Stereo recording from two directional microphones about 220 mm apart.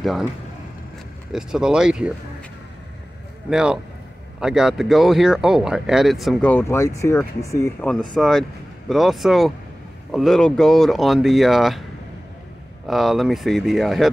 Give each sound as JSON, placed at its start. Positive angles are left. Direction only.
{"t": 0.0, "sound": "speech", "side_deg": 0}
{"t": 1.3, "sound": "speech", "side_deg": 0}
{"t": 3.4, "sound": "speech", "side_deg": 0}
{"t": 12.8, "sound": "speech", "side_deg": 0}